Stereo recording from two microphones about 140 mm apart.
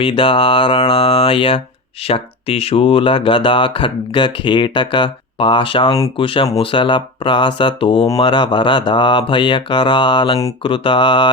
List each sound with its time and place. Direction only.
0.0 s speech: 40° left (ahead or behind)